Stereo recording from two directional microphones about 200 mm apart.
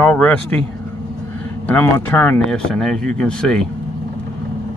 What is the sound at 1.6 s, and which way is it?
Speech, 10° left (ahead or behind).